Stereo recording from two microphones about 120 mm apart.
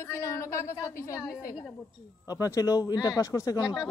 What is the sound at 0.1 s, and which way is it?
A woman's voice, 25° left (ahead or behind).